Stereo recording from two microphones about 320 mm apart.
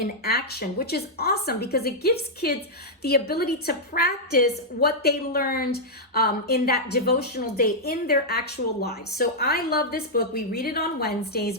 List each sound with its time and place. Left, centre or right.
0.3 s a woman's voice: left